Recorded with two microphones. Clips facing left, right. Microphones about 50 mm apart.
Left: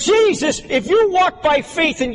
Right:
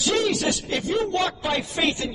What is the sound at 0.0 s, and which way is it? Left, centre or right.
A man's voice, left.